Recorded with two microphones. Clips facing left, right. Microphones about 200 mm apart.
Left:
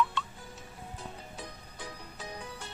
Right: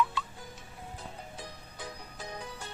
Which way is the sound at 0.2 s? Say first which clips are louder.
Even; centre (ahead or behind).